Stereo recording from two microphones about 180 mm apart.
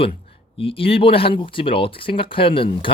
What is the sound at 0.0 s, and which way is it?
Speech, 30° left (ahead or behind).